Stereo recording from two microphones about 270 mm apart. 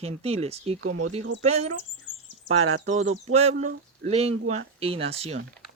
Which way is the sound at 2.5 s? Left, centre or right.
Right.